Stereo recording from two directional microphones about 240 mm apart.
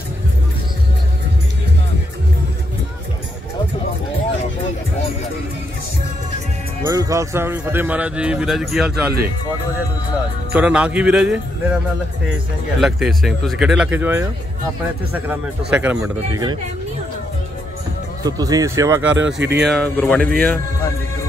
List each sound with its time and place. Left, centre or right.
6.9 s speech: centre
10.5 s speech: centre
12.8 s speech: centre
18.2 s speech: centre
19.1 s speech: right
19.8 s speech: centre